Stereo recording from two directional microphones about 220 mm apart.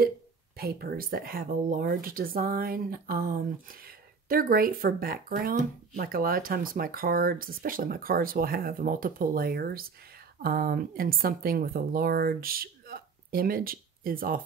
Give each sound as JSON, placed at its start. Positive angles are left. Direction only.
{"t": 0.6, "sound": "speech", "side_deg": -45}